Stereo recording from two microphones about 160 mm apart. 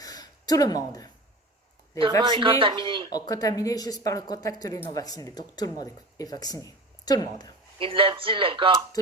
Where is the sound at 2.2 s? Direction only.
30° right (ahead or behind).